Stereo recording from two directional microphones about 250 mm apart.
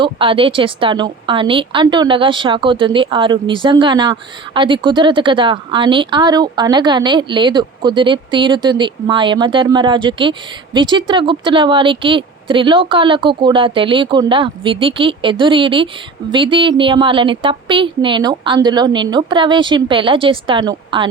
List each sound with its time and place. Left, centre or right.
0.0 s speech: right